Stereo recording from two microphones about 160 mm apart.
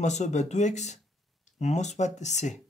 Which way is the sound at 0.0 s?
45° left (ahead or behind).